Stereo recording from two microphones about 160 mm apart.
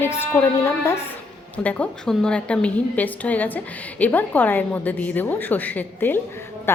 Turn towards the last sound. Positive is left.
turn(degrees=10)  # may be behind; listen again after turning